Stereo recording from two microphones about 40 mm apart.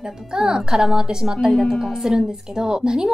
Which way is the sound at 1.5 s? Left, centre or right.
Centre.